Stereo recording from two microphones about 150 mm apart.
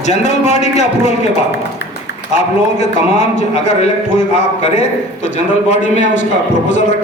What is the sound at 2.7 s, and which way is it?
A man's voice, 50° left (ahead or behind).